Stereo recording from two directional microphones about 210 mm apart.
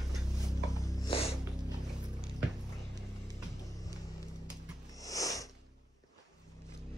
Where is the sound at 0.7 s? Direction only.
15° left (ahead or behind).